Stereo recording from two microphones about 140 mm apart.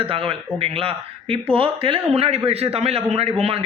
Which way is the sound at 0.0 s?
40° right (ahead or behind).